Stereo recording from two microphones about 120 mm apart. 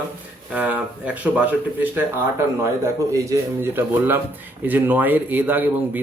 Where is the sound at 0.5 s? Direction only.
15° right (ahead or behind).